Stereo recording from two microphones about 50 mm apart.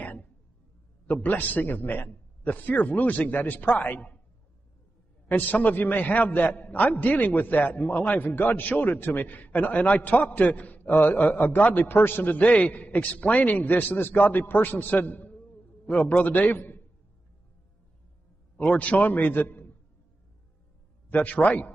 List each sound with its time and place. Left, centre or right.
0.0 s a sound: left
1.2 s a man's voice: left
5.3 s a man's voice: left
12.4 s a man's voice: left
18.6 s a man's voice: left
19.0 s a man's voice: left
21.1 s a man's voice: left